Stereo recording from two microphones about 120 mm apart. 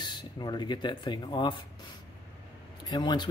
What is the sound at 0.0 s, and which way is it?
Speech, 35° left (ahead or behind).